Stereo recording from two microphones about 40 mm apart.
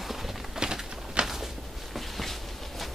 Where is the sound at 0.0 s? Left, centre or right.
Centre.